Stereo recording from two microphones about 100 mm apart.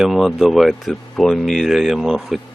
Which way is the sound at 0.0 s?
Centre (ahead or behind).